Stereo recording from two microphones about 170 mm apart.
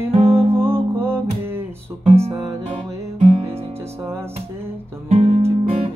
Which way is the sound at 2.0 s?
35° right (ahead or behind).